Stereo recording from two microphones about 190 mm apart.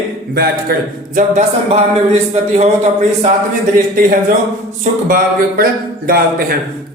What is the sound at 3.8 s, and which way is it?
Speech, 45° right (ahead or behind).